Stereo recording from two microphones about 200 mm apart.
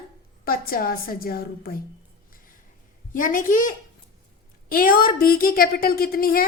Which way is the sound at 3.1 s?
40° left (ahead or behind).